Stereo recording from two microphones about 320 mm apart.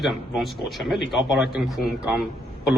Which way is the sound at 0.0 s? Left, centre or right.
Centre.